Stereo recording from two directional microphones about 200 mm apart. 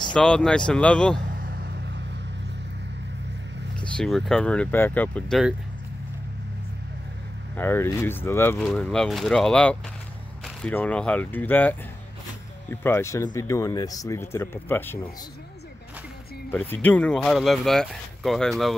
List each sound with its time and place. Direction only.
0.1 s speech: 5° left (ahead or behind)
1.3 s vehicle: 50° right (ahead or behind)
3.8 s speech: 5° left (ahead or behind)
7.5 s speech: 10° left (ahead or behind)
16.4 s speech: 10° left (ahead or behind)